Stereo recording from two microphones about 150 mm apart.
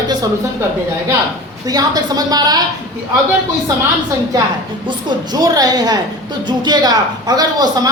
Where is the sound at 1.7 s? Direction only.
25° right (ahead or behind).